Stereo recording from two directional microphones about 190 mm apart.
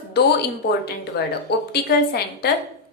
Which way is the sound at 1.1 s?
60° left (ahead or behind).